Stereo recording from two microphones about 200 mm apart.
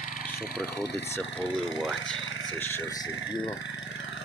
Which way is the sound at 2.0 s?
70° left (ahead or behind).